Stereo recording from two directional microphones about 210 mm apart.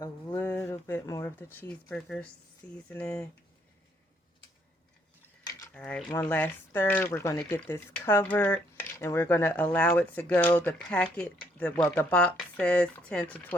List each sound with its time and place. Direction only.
0.0 s a sound: 10° left (ahead or behind)
2.9 s speech: 5° left (ahead or behind)
5.5 s mechanisms: 15° left (ahead or behind)
5.7 s speech: 5° left (ahead or behind)